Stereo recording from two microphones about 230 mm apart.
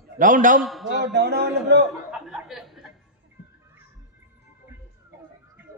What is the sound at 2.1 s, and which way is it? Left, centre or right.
Chuckle, centre.